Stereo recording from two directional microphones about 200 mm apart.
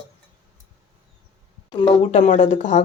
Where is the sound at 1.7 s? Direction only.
35° left (ahead or behind).